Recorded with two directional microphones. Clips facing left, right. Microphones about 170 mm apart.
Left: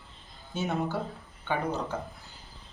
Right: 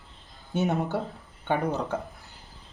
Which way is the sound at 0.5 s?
60° right (ahead or behind).